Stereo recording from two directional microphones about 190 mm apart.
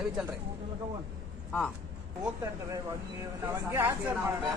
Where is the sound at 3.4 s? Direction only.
10° right (ahead or behind).